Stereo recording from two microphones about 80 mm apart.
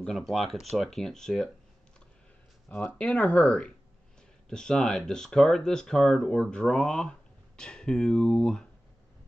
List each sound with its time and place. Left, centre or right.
0.0 s speech: centre
3.0 s speech: centre